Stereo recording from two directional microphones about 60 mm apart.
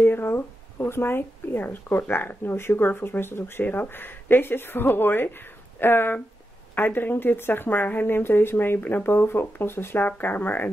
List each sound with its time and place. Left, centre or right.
0.0 s speech: left